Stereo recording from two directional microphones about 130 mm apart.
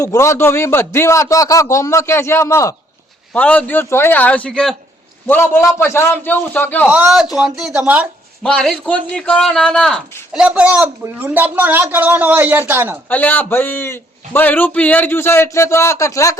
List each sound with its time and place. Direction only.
0.0 s a man's voice: 25° left (ahead or behind)
3.3 s a man's voice: 10° left (ahead or behind)
5.3 s a man's voice: 20° left (ahead or behind)
6.8 s speech: 5° right (ahead or behind)
8.4 s a man's voice: 5° left (ahead or behind)
10.3 s a man's voice: 10° right (ahead or behind)
13.1 s a man's voice: 15° left (ahead or behind)